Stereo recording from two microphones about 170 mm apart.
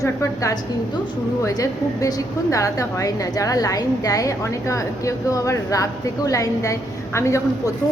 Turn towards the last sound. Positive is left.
turn(degrees=15)  # may be behind; listen again after turning